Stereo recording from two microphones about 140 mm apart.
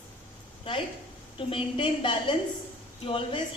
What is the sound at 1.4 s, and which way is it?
Speech, 40° left (ahead or behind).